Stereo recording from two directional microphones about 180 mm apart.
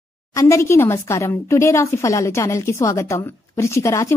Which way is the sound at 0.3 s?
15° left (ahead or behind).